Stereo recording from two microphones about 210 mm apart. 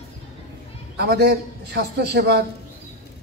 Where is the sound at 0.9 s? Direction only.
50° right (ahead or behind).